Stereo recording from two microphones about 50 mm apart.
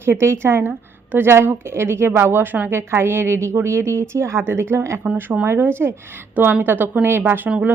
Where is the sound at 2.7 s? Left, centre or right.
Right.